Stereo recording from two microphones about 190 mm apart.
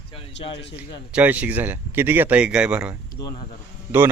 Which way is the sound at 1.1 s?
10° right (ahead or behind).